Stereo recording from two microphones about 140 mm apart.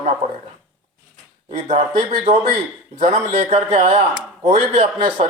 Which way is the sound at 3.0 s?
55° right (ahead or behind).